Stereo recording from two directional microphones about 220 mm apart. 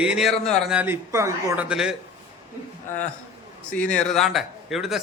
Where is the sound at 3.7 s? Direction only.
5° left (ahead or behind).